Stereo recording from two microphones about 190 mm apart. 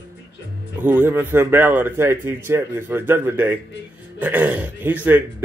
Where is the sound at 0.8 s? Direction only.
10° right (ahead or behind).